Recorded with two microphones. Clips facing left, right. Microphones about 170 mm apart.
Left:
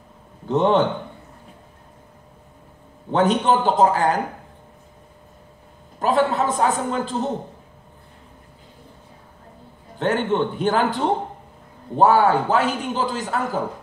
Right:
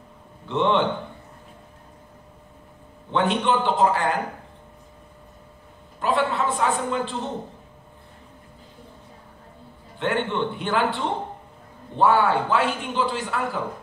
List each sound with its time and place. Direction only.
0.5 s a man's voice: 40° left (ahead or behind)
3.1 s a man's voice: 40° left (ahead or behind)
5.9 s a man's voice: 40° left (ahead or behind)
9.9 s a man's voice: 40° left (ahead or behind)